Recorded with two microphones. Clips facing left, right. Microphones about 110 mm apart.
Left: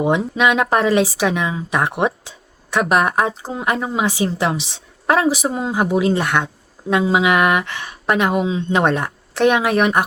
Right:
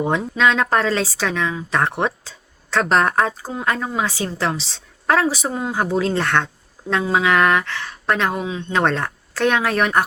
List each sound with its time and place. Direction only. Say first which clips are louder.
0.0 s speech: left 2 dB; 15° left (ahead or behind)